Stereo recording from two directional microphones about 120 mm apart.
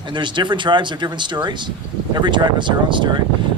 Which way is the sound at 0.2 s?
40° right (ahead or behind).